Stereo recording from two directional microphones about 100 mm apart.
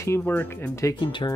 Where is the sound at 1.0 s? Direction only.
55° left (ahead or behind).